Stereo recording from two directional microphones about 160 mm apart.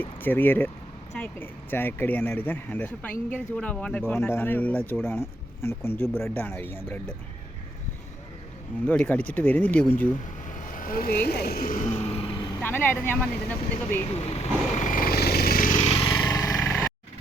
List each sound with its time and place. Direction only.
0.0 s speech: 10° left (ahead or behind)
8.9 s speech: 10° left (ahead or behind)
10.6 s vehicle: 55° left (ahead or behind)
11.3 s speech: 80° left; by 11.9 s 60° left (ahead or behind)
11.9 s vehicle: 40° left (ahead or behind)
12.5 s speech: 10° left (ahead or behind)
14.0 s vehicle: 40° left (ahead or behind); by 16.7 s 20° left (ahead or behind)